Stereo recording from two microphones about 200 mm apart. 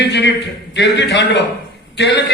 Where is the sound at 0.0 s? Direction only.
60° left (ahead or behind).